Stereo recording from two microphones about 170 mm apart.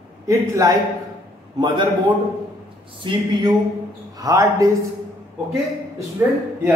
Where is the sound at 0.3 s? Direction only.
20° right (ahead or behind).